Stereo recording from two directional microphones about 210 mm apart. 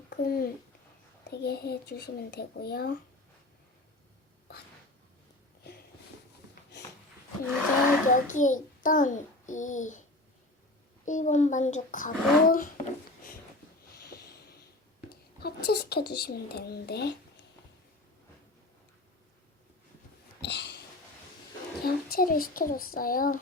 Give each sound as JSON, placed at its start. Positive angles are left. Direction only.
{"t": 0.1, "sound": "speech", "side_deg": 45}
{"t": 8.1, "sound": "a child's voice", "side_deg": 35}
{"t": 11.0, "sound": "a child's voice", "side_deg": 35}
{"t": 15.1, "sound": "speech", "side_deg": 50}
{"t": 20.4, "sound": "a sound", "side_deg": 55}
{"t": 21.8, "sound": "speech", "side_deg": 45}